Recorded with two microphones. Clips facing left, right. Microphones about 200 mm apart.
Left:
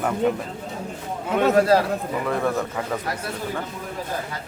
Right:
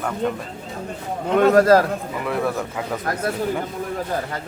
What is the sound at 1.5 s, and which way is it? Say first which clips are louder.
Speech: right 3 dB; 45° right (ahead or behind).